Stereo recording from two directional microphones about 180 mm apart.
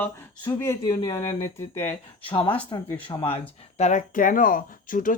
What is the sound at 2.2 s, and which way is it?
Speech, 30° left (ahead or behind).